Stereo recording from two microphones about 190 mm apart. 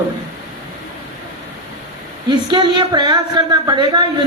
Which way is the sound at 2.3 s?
25° right (ahead or behind).